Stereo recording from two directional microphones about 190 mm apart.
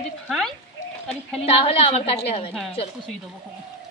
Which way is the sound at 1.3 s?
30° left (ahead or behind).